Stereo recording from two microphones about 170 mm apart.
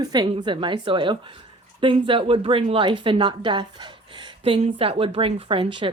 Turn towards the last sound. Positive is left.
turn(degrees=-30)  # may be behind; listen again after turning